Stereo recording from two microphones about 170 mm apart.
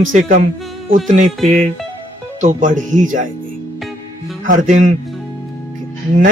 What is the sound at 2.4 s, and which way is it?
Speech, 45° right (ahead or behind).